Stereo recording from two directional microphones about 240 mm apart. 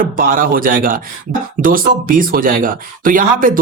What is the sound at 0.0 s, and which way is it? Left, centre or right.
Speech, right.